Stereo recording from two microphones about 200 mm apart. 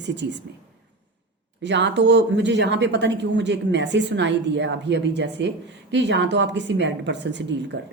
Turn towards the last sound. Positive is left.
turn(degrees=-60)  # may be behind; listen again after turning